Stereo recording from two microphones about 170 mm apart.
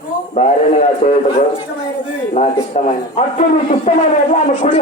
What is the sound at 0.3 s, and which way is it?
A man's voice, 40° left (ahead or behind).